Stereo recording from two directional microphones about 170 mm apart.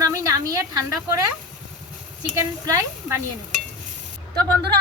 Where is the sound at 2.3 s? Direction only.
20° right (ahead or behind).